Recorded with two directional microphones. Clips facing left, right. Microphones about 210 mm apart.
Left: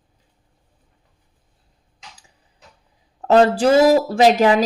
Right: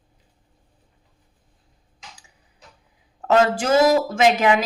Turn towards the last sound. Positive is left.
turn(degrees=35)  # may be behind; listen again after turning